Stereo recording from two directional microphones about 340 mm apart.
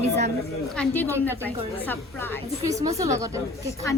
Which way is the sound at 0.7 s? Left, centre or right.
Centre.